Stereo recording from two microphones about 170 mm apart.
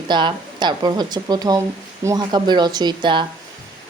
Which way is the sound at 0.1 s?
25° right (ahead or behind).